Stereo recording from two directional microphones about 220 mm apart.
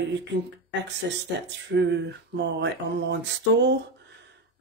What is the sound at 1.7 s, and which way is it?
Speech, 50° right (ahead or behind).